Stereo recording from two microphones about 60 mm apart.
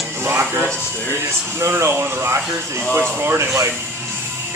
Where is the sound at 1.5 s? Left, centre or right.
Right.